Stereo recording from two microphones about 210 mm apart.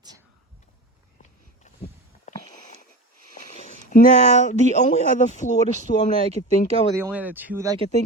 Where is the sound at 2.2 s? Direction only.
35° left (ahead or behind).